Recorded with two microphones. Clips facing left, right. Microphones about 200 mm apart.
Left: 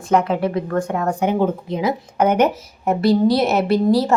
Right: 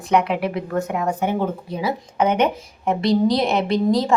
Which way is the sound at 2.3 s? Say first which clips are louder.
Left 3 dB; 5° left (ahead or behind).